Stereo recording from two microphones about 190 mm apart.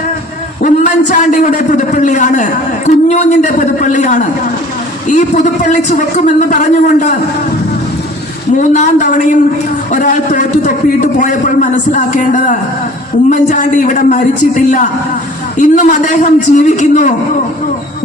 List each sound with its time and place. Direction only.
0.6 s a man's voice: 40° left (ahead or behind)
8.7 s a woman's voice: 40° left (ahead or behind)